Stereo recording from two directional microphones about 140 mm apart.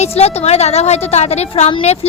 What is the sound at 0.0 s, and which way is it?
A woman's voice, 50° left (ahead or behind).